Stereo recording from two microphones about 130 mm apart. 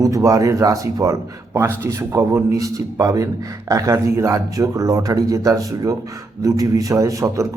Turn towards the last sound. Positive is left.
turn(degrees=-25)  # may be behind; listen again after turning